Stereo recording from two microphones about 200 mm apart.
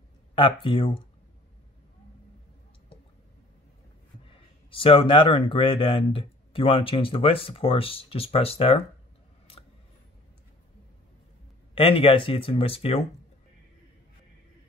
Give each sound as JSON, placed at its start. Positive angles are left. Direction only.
{"t": 0.4, "sound": "speech", "side_deg": 25}
{"t": 4.3, "sound": "speech", "side_deg": 25}
{"t": 11.7, "sound": "speech", "side_deg": 25}